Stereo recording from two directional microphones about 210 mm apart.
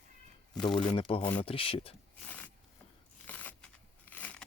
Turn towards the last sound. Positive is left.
turn(degrees=5)  # may be behind; listen again after turning